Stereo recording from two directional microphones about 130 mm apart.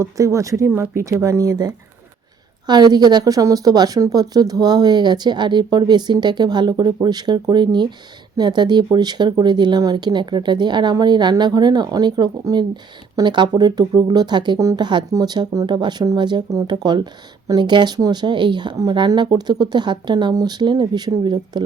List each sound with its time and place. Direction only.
0.0 s speech: 25° right (ahead or behind)